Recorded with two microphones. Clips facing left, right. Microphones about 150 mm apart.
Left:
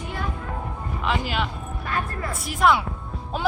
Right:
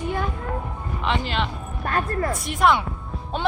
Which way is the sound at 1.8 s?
45° right (ahead or behind).